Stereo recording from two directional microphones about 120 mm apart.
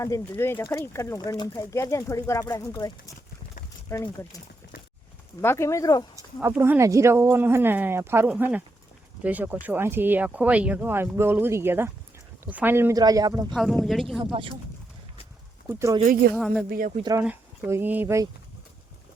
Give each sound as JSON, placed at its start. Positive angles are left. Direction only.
{"t": 0.0, "sound": "speech", "side_deg": 20}
{"t": 5.4, "sound": "speech", "side_deg": 20}
{"t": 6.1, "sound": "speech", "side_deg": -25}
{"t": 12.9, "sound": "speech", "side_deg": -30}
{"t": 13.5, "sound": "speech", "side_deg": 0}
{"t": 14.2, "sound": "speech", "side_deg": -45}
{"t": 15.6, "sound": "speech", "side_deg": -15}
{"t": 16.4, "sound": "speech", "side_deg": 0}
{"t": 17.7, "sound": "speech", "side_deg": -15}